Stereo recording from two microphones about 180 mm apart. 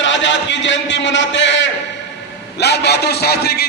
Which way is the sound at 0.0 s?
90° left.